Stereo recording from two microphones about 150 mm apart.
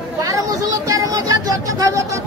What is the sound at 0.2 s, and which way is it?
Speech, 25° right (ahead or behind).